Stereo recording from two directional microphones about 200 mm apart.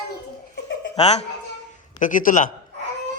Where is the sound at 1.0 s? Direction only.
35° left (ahead or behind).